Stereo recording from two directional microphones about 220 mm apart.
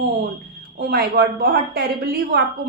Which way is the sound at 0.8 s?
45° right (ahead or behind).